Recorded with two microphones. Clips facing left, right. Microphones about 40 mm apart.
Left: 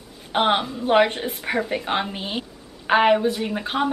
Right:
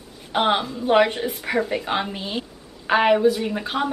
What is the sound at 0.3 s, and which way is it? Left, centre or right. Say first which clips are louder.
Speech: even; centre.